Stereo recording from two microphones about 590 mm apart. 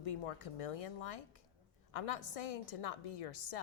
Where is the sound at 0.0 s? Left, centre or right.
Left.